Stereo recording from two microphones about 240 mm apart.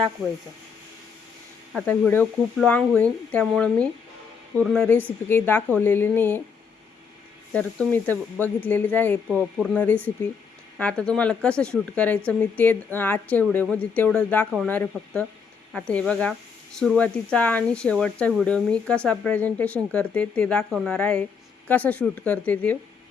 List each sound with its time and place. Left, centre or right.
1.7 s a woman's voice: centre
7.5 s a woman's voice: centre